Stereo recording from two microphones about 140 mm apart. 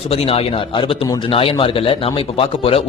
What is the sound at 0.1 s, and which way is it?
A man's voice, 45° left (ahead or behind).